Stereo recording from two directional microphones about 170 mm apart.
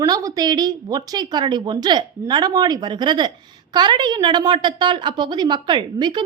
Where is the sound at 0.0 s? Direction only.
20° right (ahead or behind).